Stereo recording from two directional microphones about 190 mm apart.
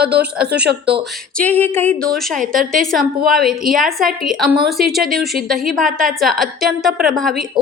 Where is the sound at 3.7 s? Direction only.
Centre (ahead or behind).